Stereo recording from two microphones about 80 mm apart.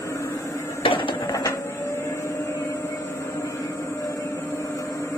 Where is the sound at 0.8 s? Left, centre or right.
Left.